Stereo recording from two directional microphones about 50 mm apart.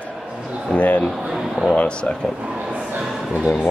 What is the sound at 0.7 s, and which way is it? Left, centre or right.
Speech, left.